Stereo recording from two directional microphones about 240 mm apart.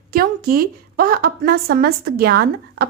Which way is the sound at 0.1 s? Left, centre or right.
Right.